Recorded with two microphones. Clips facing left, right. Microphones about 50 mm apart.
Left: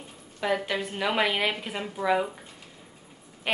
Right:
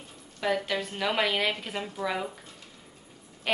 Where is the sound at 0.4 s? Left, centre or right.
Centre.